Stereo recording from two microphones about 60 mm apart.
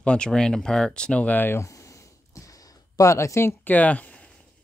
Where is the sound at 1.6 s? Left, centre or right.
Left.